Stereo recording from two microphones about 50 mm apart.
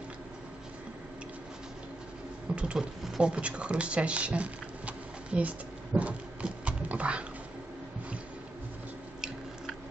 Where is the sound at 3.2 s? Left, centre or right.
Right.